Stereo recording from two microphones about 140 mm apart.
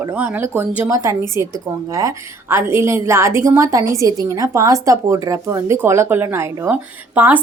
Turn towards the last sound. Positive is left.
turn(degrees=-10)  # may be behind; listen again after turning